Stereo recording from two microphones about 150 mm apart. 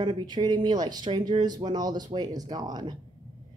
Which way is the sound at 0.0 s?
30° right (ahead or behind).